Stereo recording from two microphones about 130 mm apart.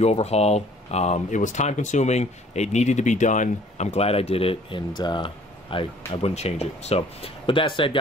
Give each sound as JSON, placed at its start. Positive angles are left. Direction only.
{"t": 0.0, "sound": "speech", "side_deg": 55}